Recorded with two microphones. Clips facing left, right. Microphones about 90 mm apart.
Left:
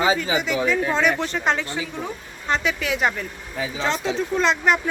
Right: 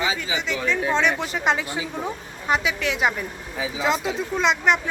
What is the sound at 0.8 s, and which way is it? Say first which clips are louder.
Speech: left 1 dB; centre (ahead or behind).